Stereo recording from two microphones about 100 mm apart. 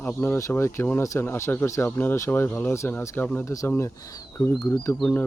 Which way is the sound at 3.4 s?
35° left (ahead or behind).